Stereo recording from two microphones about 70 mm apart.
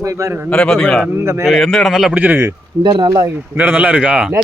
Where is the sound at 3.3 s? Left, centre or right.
Right.